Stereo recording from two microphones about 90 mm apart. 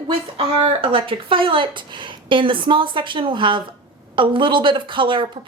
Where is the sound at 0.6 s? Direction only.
70° right (ahead or behind).